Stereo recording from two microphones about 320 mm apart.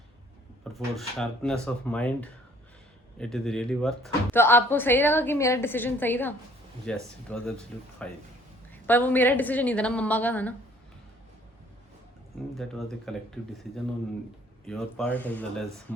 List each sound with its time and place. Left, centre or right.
0.6 s speech: centre
13.1 s speech: centre